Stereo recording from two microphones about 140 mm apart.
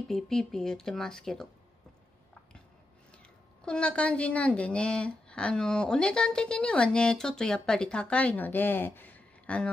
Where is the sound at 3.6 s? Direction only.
10° left (ahead or behind).